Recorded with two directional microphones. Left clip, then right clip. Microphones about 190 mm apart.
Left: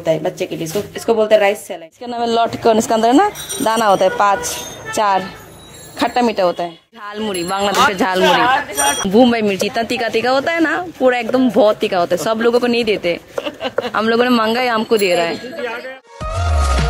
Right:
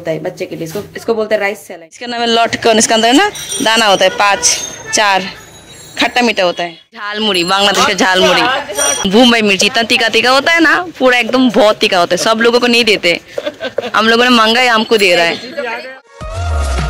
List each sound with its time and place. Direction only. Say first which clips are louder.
0.0 s speech: left 1 dB; centre (ahead or behind)